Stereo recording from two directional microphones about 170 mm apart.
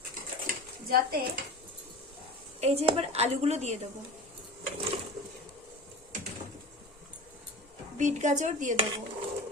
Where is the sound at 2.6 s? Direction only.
40° right (ahead or behind).